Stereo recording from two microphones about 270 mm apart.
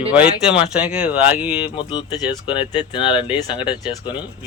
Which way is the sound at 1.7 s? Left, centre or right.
Centre.